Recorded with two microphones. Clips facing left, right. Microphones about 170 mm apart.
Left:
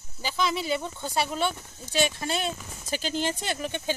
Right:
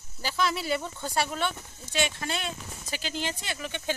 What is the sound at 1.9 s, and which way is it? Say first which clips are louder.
Speech: left 3 dB; 35° left (ahead or behind).